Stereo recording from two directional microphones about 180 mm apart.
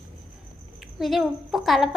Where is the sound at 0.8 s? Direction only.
Centre (ahead or behind).